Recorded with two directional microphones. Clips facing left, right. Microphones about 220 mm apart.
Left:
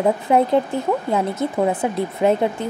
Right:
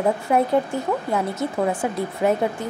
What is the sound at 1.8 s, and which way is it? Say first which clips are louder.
Speech: left 3 dB; 20° left (ahead or behind).